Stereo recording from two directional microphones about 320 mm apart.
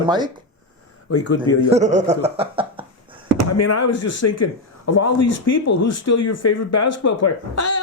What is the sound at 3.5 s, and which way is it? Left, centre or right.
Speech, left.